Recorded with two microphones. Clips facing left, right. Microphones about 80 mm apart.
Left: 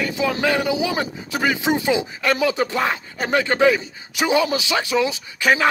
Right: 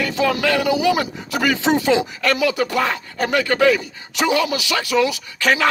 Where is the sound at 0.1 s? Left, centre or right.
Left.